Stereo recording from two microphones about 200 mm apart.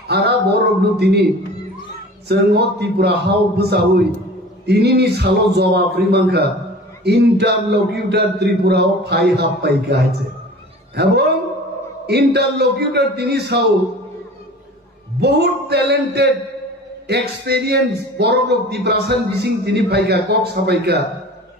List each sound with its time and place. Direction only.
0.1 s a man's voice: 55° right (ahead or behind)
2.2 s speech: 55° right (ahead or behind)
15.1 s speech: 55° right (ahead or behind)